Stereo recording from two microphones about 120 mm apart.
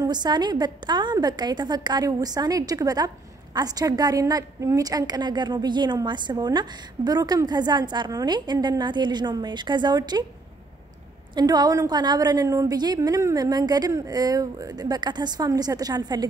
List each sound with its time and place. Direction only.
0.0 s a woman's voice: 35° right (ahead or behind)
11.3 s a woman's voice: 35° right (ahead or behind)